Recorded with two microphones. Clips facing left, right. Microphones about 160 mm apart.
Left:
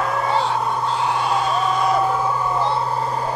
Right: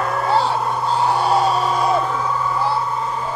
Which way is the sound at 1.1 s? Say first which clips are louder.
Right 6 dB; 35° right (ahead or behind).